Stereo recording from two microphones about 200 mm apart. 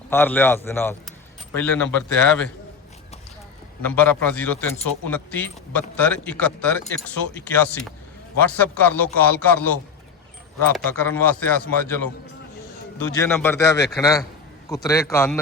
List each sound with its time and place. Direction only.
0.1 s a man's voice: 10° left (ahead or behind)
3.8 s a man's voice: 10° left (ahead or behind)
10.8 s a man's voice: 10° left (ahead or behind)
13.2 s a man's voice: 10° left (ahead or behind)